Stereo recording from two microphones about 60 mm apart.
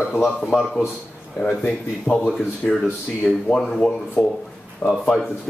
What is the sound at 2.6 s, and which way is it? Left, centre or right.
Speech, left.